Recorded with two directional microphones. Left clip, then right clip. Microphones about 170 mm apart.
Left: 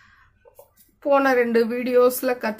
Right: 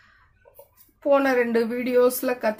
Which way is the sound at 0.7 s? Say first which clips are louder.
Left 1 dB; 10° left (ahead or behind).